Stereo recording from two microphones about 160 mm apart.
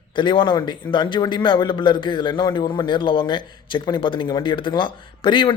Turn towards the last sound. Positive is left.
turn(degrees=30)  # may be behind; listen again after turning